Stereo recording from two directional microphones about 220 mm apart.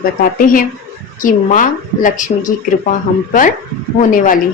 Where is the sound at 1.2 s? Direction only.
35° left (ahead or behind).